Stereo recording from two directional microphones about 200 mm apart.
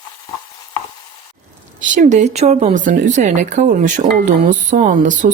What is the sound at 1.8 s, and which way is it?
Speech, 40° right (ahead or behind).